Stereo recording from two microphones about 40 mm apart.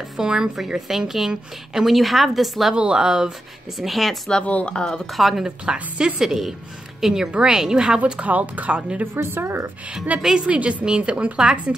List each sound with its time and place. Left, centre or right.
0.2 s a woman's voice: centre
1.9 s a woman's voice: centre
2.7 s speech: right
3.7 s a woman's voice: centre
4.6 s speech: left
5.1 s a woman's voice: centre
5.7 s speech: right
6.1 s a woman's voice: centre
8.0 s speech: right
9.0 s a woman's voice: right
10.2 s speech: centre
10.5 s speech: right